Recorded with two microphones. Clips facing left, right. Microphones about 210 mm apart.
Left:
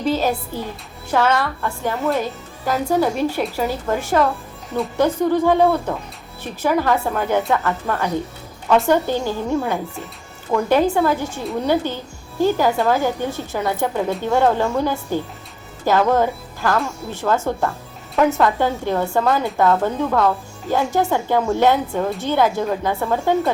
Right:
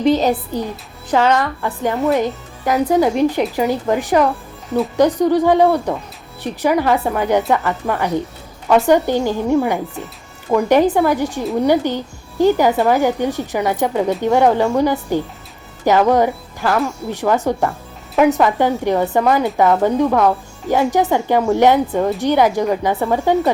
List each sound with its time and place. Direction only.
0.0 s speech: 20° right (ahead or behind)